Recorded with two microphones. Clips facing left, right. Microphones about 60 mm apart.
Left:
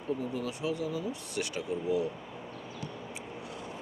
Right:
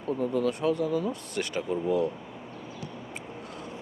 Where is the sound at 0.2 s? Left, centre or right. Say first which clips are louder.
Right 8 dB; right.